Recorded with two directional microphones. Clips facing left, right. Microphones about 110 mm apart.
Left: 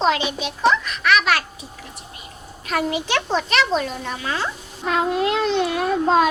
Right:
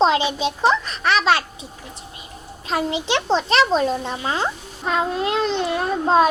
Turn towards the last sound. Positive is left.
turn(degrees=-35)  # may be behind; listen again after turning